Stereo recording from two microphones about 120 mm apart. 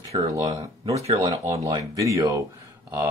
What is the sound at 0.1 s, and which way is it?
Speech, 30° right (ahead or behind).